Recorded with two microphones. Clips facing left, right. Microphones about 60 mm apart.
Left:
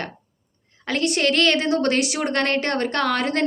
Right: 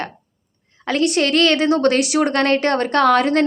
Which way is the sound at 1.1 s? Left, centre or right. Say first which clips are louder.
Right 2 dB; right.